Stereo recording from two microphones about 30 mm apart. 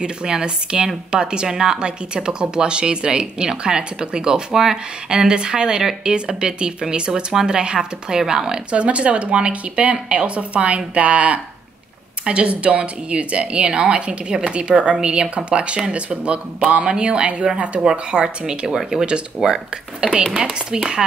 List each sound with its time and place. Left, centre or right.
0.0 s speech: right
1.5 s speech: centre
1.8 s speech: right
5.3 s speech: right
8.7 s speech: right
17.7 s speech: right
18.8 s speech: centre